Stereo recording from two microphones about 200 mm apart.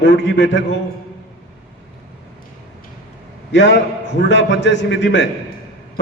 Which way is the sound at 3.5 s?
60° left (ahead or behind).